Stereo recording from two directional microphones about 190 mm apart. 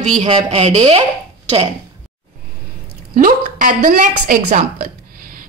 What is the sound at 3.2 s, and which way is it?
A woman's voice, 45° right (ahead or behind).